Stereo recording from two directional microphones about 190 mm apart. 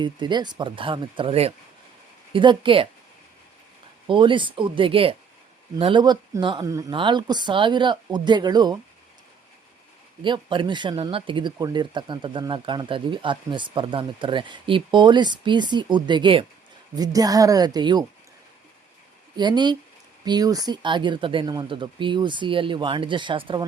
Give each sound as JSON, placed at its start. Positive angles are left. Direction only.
{"t": 0.0, "sound": "speech", "side_deg": -25}
{"t": 4.0, "sound": "speech", "side_deg": -25}
{"t": 10.2, "sound": "speech", "side_deg": -25}
{"t": 19.4, "sound": "speech", "side_deg": -20}